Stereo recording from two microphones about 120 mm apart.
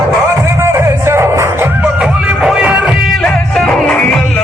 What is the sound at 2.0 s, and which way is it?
Music, 10° right (ahead or behind).